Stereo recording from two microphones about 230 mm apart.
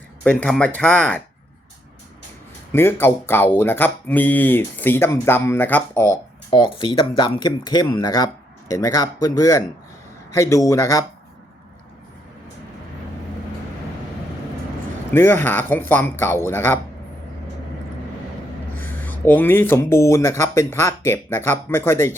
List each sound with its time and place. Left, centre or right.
0.3 s speech: centre
2.7 s speech: centre
15.1 s speech: centre
19.2 s speech: centre